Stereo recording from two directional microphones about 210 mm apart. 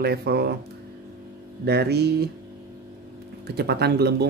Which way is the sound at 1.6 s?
50° right (ahead or behind).